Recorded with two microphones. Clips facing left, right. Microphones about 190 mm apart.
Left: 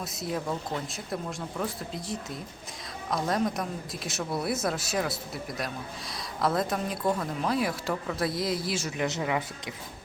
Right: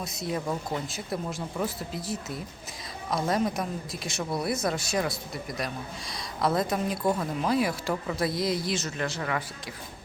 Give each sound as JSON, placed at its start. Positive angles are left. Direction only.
{"t": 0.0, "sound": "a man's voice", "side_deg": 0}